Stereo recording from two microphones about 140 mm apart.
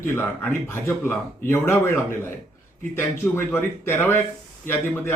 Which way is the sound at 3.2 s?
15° left (ahead or behind).